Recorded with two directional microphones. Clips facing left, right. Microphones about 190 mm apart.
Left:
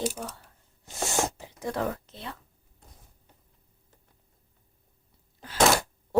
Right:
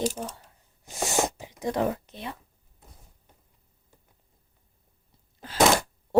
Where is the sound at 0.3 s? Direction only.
15° right (ahead or behind).